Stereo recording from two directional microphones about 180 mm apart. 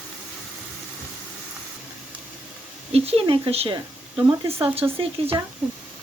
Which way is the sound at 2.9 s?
35° right (ahead or behind).